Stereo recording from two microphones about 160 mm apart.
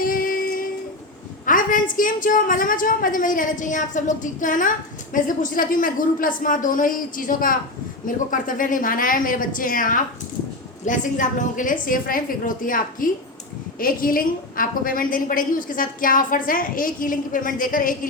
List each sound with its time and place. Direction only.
0.0 s music: 60° left (ahead or behind)
1.5 s a woman's voice: 55° left (ahead or behind)